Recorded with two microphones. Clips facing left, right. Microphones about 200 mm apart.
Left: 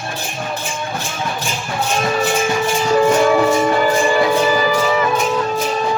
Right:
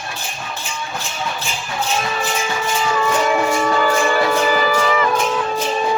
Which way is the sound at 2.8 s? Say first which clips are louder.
Left 6 dB; 40° left (ahead or behind).